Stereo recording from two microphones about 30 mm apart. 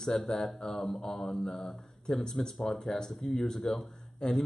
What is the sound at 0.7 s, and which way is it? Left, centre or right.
A man's voice, centre.